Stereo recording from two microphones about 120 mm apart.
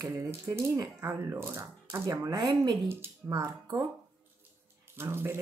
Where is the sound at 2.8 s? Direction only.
20° right (ahead or behind).